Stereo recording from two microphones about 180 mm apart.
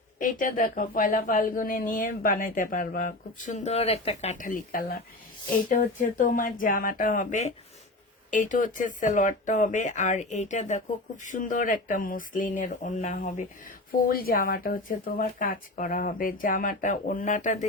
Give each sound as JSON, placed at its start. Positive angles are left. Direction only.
{"t": 0.2, "sound": "speech", "side_deg": 50}
{"t": 14.1, "sound": "speech", "side_deg": 55}